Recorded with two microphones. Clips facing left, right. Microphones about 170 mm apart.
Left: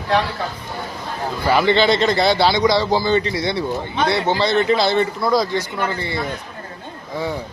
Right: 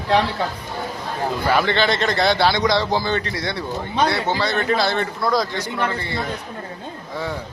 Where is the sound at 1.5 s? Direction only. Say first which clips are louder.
Left 5 dB; 15° left (ahead or behind).